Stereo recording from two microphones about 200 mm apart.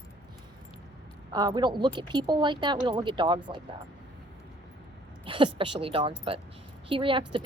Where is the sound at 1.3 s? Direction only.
20° right (ahead or behind).